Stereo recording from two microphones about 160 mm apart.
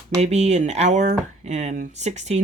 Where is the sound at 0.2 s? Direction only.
45° right (ahead or behind).